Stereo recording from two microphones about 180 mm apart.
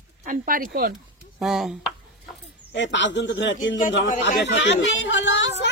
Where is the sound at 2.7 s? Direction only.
90° left.